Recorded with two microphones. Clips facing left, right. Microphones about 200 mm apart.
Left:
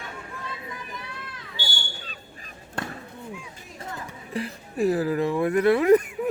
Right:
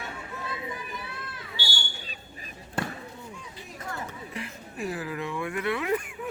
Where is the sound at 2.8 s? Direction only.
5° right (ahead or behind).